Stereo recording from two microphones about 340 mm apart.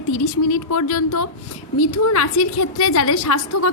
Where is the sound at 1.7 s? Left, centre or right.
Left.